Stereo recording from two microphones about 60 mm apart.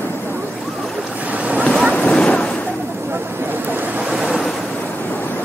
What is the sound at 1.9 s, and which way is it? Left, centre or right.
Boat, left.